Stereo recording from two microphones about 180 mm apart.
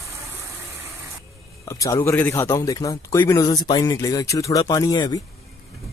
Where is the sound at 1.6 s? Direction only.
20° left (ahead or behind).